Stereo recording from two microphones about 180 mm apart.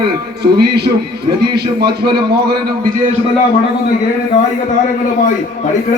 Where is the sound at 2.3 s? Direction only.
60° right (ahead or behind).